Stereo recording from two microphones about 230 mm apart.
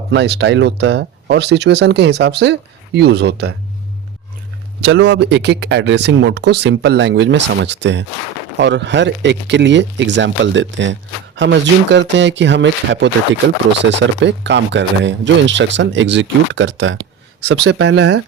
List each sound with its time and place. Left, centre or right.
0.1 s speech: right
4.9 s speech: right
14.2 s speech: right